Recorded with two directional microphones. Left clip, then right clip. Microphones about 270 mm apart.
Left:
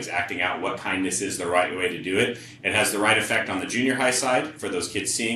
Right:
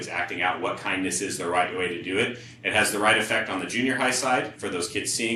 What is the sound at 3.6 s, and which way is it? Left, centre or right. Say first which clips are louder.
Speech: left 2 dB; centre.